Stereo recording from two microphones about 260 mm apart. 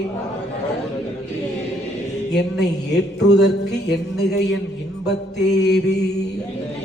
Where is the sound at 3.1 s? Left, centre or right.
Left.